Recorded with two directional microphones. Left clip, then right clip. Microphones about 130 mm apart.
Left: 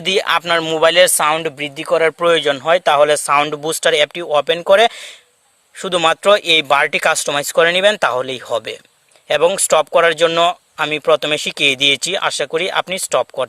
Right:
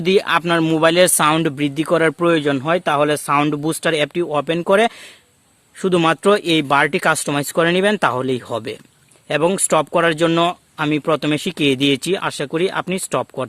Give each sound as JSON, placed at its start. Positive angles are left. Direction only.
{"t": 0.0, "sound": "speech", "side_deg": 40}
{"t": 1.1, "sound": "speech", "side_deg": 20}
{"t": 2.1, "sound": "speech", "side_deg": 35}